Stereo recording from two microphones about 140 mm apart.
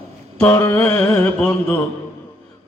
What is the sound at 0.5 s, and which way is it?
Mantra, 20° left (ahead or behind).